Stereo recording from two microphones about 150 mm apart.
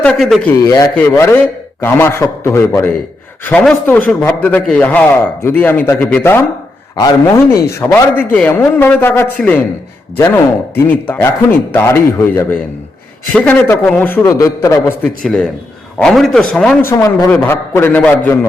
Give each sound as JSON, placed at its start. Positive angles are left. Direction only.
{"t": 0.0, "sound": "a man's voice", "side_deg": 5}
{"t": 0.9, "sound": "a man's voice", "side_deg": 15}
{"t": 6.9, "sound": "a man's voice", "side_deg": 25}
{"t": 15.0, "sound": "a man's voice", "side_deg": 5}
{"t": 16.9, "sound": "a man's voice", "side_deg": 20}